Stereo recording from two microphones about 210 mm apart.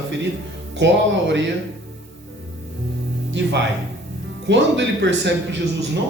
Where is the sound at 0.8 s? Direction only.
60° right (ahead or behind).